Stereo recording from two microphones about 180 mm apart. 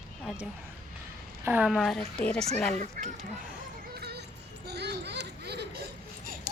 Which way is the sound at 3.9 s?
60° right (ahead or behind).